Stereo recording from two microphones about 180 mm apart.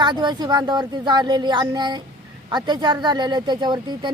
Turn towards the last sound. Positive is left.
turn(degrees=-25)  # may be behind; listen again after turning